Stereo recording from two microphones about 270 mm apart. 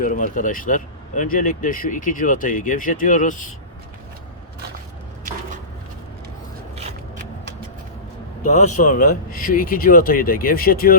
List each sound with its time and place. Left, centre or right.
0.0 s speech: left
8.4 s speech: left